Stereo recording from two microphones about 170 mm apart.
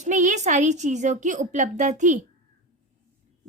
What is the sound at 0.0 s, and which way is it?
A woman's voice, 45° right (ahead or behind).